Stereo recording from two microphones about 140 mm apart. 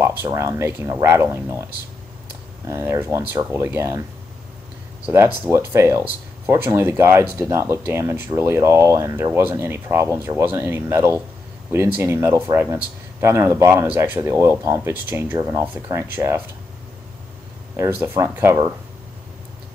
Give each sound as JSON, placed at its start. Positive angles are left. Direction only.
{"t": 0.0, "sound": "speech", "side_deg": -20}
{"t": 2.7, "sound": "speech", "side_deg": -15}
{"t": 5.0, "sound": "speech", "side_deg": -15}
{"t": 17.7, "sound": "speech", "side_deg": -20}